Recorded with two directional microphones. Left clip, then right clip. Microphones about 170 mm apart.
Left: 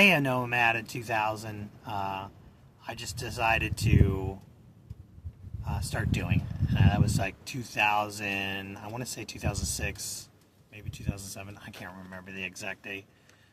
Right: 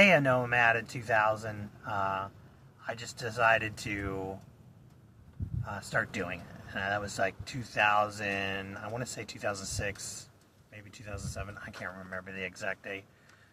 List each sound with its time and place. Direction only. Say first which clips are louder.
0.0 s speech: even; 30° left (ahead or behind)
5.6 s speech: right 3 dB; 25° left (ahead or behind)